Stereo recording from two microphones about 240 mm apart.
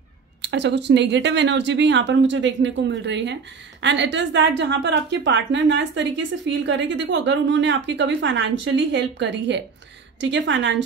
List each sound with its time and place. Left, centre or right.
0.4 s a woman's voice: right